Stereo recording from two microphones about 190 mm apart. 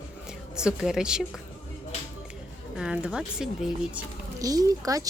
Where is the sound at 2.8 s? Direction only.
5° right (ahead or behind).